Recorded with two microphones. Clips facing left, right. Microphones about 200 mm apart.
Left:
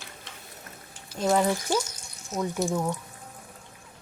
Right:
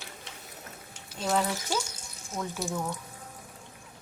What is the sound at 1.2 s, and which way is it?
Speech, 10° left (ahead or behind).